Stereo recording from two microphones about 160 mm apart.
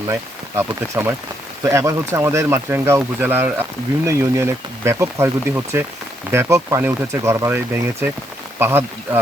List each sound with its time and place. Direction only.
0.1 s speech: 15° right (ahead or behind)